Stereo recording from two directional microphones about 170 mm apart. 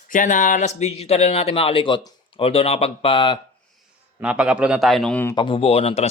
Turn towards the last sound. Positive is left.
turn(degrees=35)  # may be behind; listen again after turning